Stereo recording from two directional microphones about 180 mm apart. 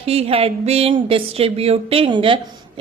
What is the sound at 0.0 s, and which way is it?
Speech, 35° right (ahead or behind).